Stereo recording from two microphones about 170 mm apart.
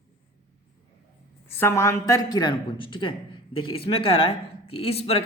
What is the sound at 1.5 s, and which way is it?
Speech, 15° left (ahead or behind).